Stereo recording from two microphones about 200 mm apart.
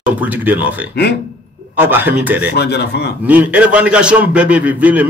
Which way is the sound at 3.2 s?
10° right (ahead or behind).